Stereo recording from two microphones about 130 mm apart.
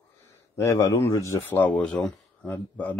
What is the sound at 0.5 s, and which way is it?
Speech, 25° left (ahead or behind).